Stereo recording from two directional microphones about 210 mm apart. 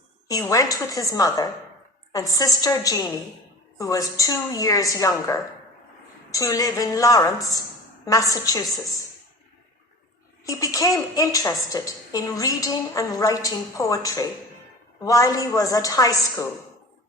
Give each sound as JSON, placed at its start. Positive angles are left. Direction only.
{"t": 0.3, "sound": "a woman's voice", "side_deg": 15}
{"t": 10.4, "sound": "a woman's voice", "side_deg": 15}